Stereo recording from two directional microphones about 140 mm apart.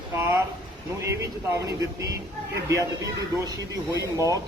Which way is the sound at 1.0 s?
20° right (ahead or behind).